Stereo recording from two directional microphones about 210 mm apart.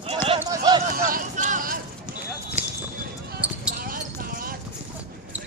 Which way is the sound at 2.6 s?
35° left (ahead or behind).